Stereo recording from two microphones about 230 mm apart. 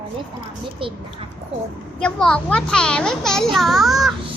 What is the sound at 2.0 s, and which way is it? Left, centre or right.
A child's voice, centre.